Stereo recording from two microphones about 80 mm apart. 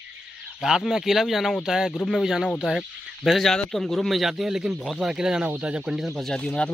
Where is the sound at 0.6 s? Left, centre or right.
Centre.